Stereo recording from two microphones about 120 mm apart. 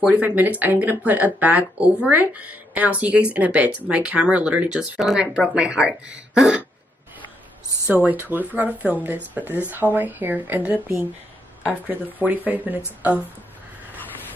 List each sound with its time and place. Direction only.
0.0 s speech: 10° right (ahead or behind)
7.9 s speech: 15° right (ahead or behind)
12.2 s speech: 15° right (ahead or behind)